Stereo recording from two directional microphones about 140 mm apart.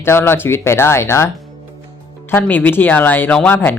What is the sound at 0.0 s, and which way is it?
Speech, 15° left (ahead or behind).